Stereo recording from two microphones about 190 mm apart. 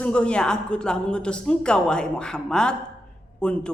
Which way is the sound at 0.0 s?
5° left (ahead or behind).